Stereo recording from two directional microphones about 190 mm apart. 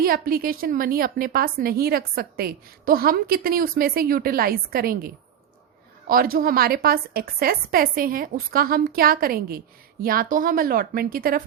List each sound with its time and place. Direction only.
0.0 s a woman's voice: 50° right (ahead or behind)